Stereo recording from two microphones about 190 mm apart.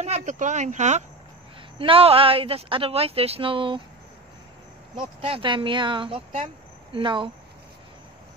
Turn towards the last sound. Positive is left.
turn(degrees=-25)  # may be behind; listen again after turning